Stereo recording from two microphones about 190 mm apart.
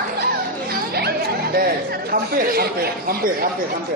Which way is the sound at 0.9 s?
55° right (ahead or behind).